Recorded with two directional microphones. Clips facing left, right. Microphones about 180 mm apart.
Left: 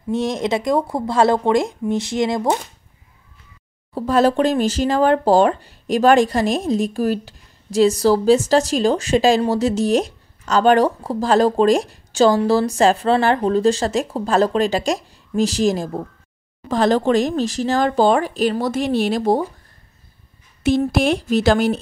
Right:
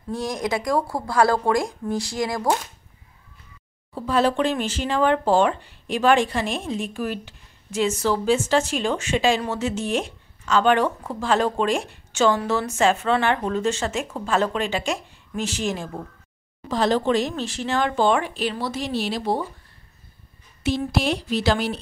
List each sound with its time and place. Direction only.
0.1 s speech: 25° left (ahead or behind)
3.9 s speech: 40° left (ahead or behind)
16.6 s speech: 50° left (ahead or behind)
20.6 s speech: 50° left (ahead or behind)